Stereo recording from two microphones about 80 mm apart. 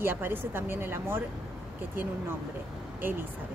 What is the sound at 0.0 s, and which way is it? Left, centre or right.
Speech, right.